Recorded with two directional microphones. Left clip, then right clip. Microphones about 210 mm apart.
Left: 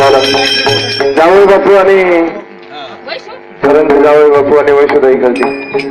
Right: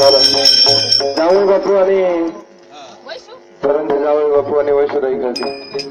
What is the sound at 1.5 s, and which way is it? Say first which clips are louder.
Speech: left 7 dB; 50° right (ahead or behind).